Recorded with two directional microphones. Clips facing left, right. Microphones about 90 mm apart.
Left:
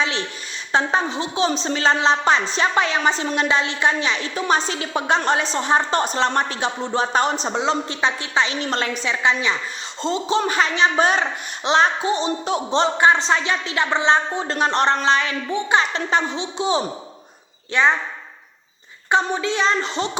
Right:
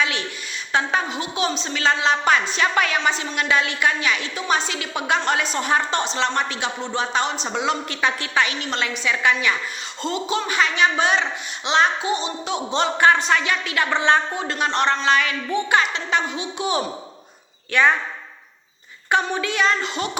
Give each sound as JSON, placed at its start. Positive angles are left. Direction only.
{"t": 0.7, "sound": "speech", "side_deg": 30}
{"t": 6.0, "sound": "speech", "side_deg": 40}
{"t": 8.6, "sound": "speech", "side_deg": 40}
{"t": 9.0, "sound": "a woman's voice", "side_deg": 25}
{"t": 13.0, "sound": "a woman's voice", "side_deg": 25}
{"t": 14.4, "sound": "speech", "side_deg": 35}
{"t": 15.9, "sound": "speech", "side_deg": 35}
{"t": 19.1, "sound": "a woman's voice", "side_deg": 25}